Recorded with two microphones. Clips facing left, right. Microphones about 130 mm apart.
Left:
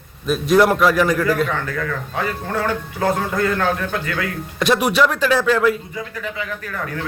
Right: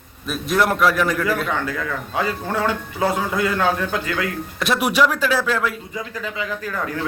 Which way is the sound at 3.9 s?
25° right (ahead or behind).